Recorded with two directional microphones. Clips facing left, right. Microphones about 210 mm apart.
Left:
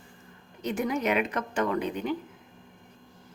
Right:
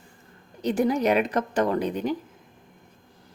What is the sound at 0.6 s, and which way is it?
A woman's voice, 35° right (ahead or behind).